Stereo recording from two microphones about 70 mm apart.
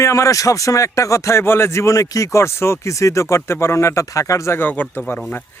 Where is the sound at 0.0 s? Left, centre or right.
Left.